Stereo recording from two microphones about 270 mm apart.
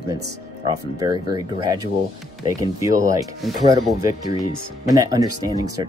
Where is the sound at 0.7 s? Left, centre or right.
Centre.